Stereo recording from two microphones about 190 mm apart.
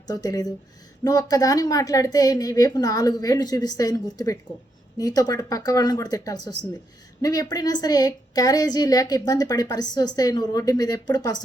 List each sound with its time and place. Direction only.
0.1 s a woman's voice: 20° left (ahead or behind)